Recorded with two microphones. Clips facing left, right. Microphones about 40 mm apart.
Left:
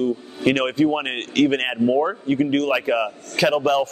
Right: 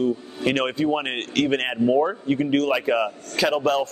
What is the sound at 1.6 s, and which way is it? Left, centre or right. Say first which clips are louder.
Speech: left 1 dB; centre.